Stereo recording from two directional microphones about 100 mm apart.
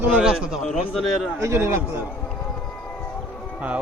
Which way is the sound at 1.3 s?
30° right (ahead or behind).